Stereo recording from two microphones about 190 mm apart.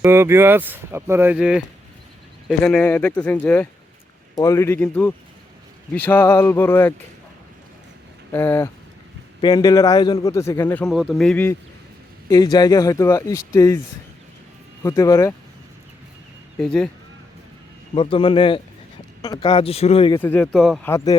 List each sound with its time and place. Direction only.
0.0 s speech: 15° right (ahead or behind); by 6.9 s 10° left (ahead or behind)
8.3 s a man's voice: 10° left (ahead or behind)
10.8 s speech: centre (ahead or behind)
12.3 s speech: 20° left (ahead or behind)
14.8 s speech: 20° left (ahead or behind)
16.6 s speech: 5° left (ahead or behind)
17.9 s a man's voice: 30° left (ahead or behind)
20.1 s speech: 10° left (ahead or behind)
20.8 s speech: 15° left (ahead or behind)